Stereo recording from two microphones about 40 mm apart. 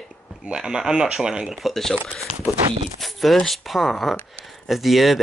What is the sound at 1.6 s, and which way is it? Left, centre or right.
Speech, centre.